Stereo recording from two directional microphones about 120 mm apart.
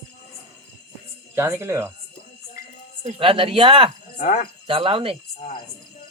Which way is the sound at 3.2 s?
50° right (ahead or behind).